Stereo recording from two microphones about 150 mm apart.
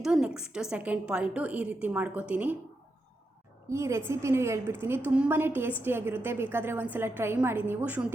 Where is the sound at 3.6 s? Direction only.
20° right (ahead or behind).